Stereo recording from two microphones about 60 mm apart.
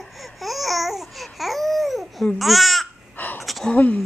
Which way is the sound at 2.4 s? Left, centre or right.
Centre.